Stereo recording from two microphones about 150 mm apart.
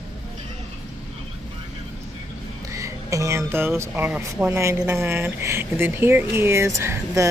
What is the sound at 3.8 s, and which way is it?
A woman's voice, 15° right (ahead or behind).